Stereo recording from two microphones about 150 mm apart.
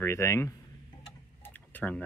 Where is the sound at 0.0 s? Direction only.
20° left (ahead or behind).